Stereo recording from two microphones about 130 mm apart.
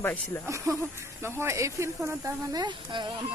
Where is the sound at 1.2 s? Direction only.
20° right (ahead or behind); by 3.1 s 35° right (ahead or behind).